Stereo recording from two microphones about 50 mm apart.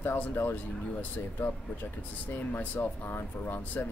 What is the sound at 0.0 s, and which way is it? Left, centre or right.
Speech, left.